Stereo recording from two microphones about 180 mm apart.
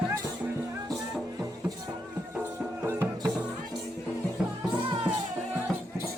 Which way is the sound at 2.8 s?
15° right (ahead or behind).